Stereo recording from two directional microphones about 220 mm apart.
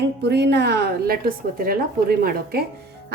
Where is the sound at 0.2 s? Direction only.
50° right (ahead or behind).